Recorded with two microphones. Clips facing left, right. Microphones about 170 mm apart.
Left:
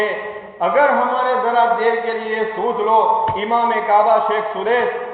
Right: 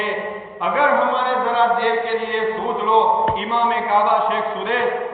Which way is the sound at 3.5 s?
45° left (ahead or behind).